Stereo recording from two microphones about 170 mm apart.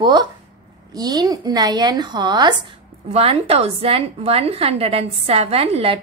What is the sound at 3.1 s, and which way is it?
A woman's voice, 35° right (ahead or behind).